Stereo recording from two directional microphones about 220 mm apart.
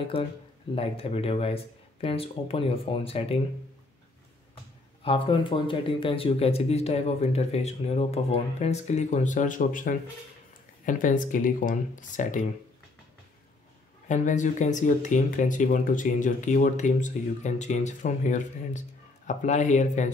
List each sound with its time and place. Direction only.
0.1 s speech: 25° left (ahead or behind)
5.0 s speech: 25° left (ahead or behind)
14.0 s speech: 35° left (ahead or behind)